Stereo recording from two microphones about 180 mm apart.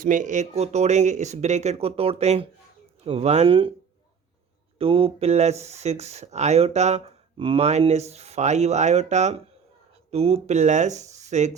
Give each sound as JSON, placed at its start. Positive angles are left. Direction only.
{"t": 0.0, "sound": "speech", "side_deg": -45}
{"t": 4.8, "sound": "speech", "side_deg": -30}